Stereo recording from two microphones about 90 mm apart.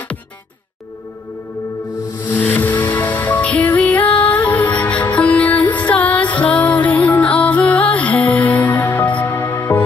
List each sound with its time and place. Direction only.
2.2 s music: 20° left (ahead or behind)